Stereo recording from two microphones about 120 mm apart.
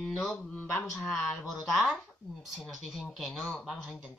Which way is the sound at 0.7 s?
20° left (ahead or behind).